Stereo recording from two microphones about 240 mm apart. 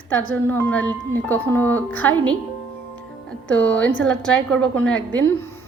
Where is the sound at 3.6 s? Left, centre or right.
Centre.